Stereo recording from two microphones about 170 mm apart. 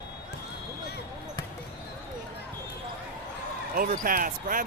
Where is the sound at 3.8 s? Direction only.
55° right (ahead or behind).